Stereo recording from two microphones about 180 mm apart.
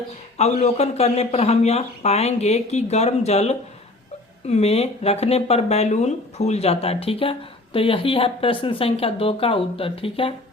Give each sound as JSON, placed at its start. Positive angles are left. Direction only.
{"t": 0.3, "sound": "speech", "side_deg": 35}